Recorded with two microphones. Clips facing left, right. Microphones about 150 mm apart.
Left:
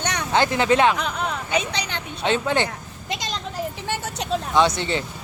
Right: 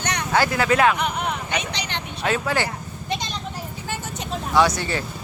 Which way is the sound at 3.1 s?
90° left.